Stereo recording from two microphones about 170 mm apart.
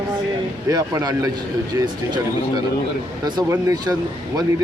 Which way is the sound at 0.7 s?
20° right (ahead or behind).